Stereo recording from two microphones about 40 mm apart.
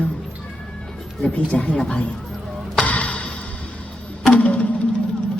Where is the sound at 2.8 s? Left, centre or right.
Left.